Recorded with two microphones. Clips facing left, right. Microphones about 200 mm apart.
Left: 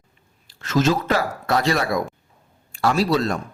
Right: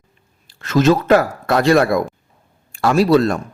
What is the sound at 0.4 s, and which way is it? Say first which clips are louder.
A man's voice: right 6 dB; 55° right (ahead or behind).